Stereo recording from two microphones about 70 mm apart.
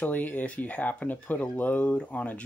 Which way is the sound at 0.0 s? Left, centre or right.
Left.